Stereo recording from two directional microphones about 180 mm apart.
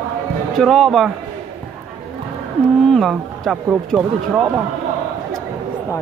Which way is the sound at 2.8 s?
5° left (ahead or behind).